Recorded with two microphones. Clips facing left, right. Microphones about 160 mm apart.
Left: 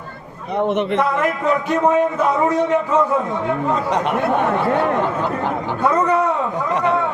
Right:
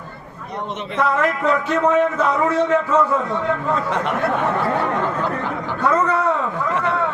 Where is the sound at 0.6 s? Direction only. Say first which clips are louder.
Left 11 dB; 60° left (ahead or behind).